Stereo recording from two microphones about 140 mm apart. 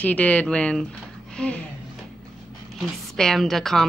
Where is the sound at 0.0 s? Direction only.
10° left (ahead or behind).